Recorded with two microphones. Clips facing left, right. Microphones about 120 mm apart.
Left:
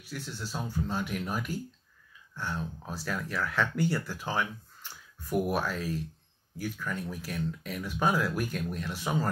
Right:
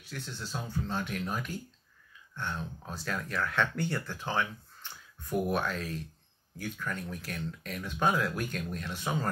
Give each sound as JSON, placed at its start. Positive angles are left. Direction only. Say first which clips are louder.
{"t": 0.0, "sound": "speech", "louder": "left 2 dB", "side_deg": 5}